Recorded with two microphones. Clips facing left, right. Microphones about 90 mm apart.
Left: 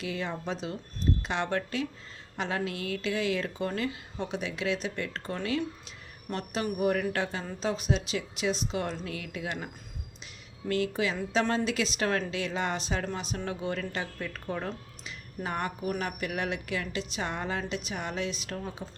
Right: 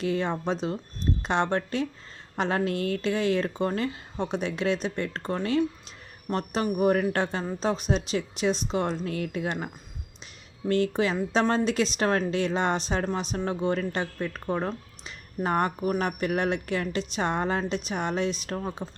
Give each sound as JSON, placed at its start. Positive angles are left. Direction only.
{"t": 0.0, "sound": "a woman's voice", "side_deg": -35}
{"t": 10.7, "sound": "a woman's voice", "side_deg": -35}
{"t": 15.4, "sound": "a woman's voice", "side_deg": -40}